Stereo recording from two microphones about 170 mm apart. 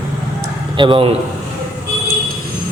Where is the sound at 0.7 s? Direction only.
30° right (ahead or behind).